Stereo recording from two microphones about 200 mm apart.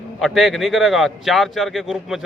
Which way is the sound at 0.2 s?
Centre (ahead or behind).